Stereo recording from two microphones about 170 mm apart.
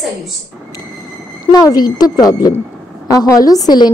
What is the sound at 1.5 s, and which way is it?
A woman's voice, 20° left (ahead or behind).